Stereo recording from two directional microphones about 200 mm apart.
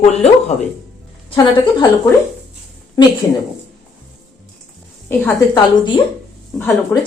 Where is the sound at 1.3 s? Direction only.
20° left (ahead or behind).